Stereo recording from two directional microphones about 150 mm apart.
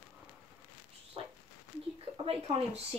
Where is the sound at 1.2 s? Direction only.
40° right (ahead or behind).